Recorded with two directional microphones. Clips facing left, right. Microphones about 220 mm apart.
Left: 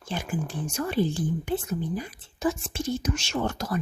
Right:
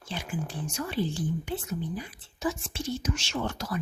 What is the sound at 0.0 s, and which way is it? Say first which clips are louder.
A woman's voice: left 4 dB; 50° left (ahead or behind).